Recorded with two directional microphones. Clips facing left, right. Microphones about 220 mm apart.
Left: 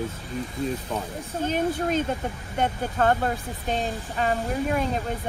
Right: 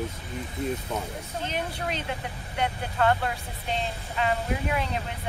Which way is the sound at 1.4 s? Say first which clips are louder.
Left 9 dB; 45° left (ahead or behind).